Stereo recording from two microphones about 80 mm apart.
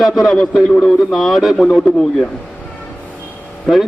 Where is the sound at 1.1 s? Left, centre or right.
Centre.